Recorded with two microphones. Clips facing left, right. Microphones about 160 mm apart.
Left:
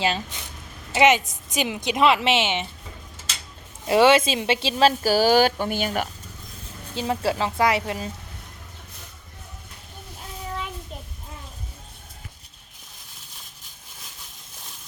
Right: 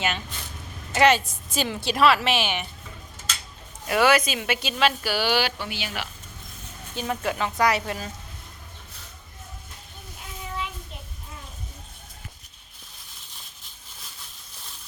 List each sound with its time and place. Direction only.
0.9 s a woman's voice: 20° left (ahead or behind)
3.8 s speech: 25° left (ahead or behind); by 6.1 s 45° left (ahead or behind)
6.9 s a woman's voice: 30° left (ahead or behind)